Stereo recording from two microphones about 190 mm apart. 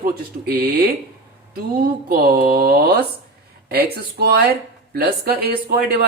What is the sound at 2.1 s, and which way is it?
Speech, 50° right (ahead or behind).